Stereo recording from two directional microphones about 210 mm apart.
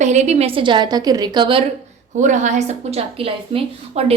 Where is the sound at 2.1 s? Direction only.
35° right (ahead or behind).